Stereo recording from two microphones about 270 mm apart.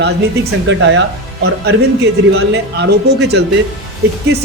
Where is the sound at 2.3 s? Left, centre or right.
Right.